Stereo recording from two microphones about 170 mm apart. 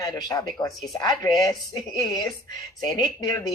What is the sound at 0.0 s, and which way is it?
Speech, 25° left (ahead or behind).